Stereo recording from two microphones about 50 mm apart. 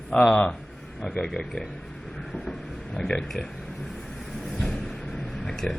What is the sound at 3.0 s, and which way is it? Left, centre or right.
Speech, centre.